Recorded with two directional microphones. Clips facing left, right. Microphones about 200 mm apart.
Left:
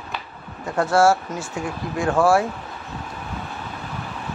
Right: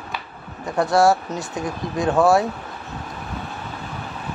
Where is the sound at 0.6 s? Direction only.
15° right (ahead or behind).